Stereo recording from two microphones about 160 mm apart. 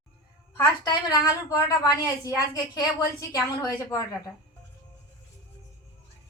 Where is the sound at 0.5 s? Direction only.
20° left (ahead or behind).